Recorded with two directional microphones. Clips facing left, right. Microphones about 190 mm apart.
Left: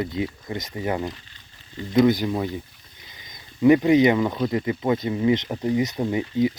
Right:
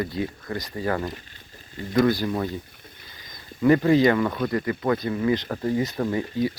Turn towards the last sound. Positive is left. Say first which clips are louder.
# left 2 dB
turn(degrees=15)  # may be behind; listen again after turning